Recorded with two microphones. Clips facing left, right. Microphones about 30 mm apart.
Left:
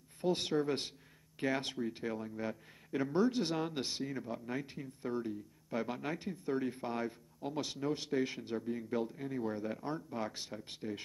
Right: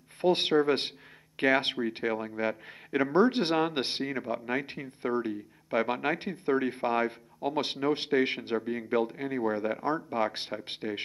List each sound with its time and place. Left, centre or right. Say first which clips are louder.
0.2 s speech: right 9 dB; right